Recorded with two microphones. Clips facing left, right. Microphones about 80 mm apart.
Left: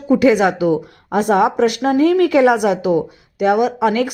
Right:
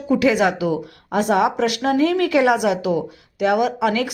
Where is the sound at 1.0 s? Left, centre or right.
Left.